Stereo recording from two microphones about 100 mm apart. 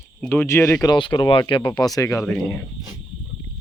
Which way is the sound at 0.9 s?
45° left (ahead or behind).